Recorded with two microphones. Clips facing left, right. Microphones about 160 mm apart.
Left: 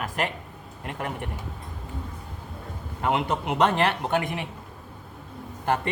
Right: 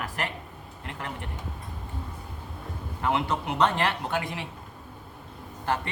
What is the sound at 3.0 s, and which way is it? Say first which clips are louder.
A man's voice: left 2 dB; 20° left (ahead or behind).